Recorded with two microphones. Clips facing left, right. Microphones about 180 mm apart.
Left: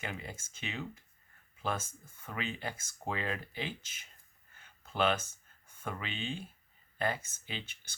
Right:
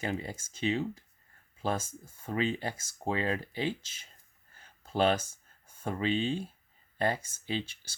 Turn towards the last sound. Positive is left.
turn(degrees=-35)  # may be behind; listen again after turning